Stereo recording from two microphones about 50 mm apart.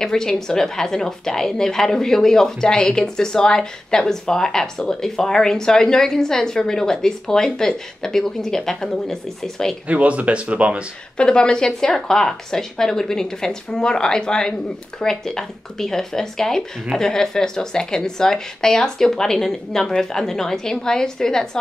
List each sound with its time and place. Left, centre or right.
0.0 s a woman's voice: centre
9.8 s speech: right
11.1 s a woman's voice: centre